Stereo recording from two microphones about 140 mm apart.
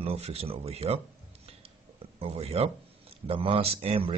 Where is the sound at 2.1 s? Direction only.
45° right (ahead or behind).